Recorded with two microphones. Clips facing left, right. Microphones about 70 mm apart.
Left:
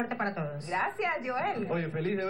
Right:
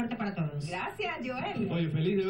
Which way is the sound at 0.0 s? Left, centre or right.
Left.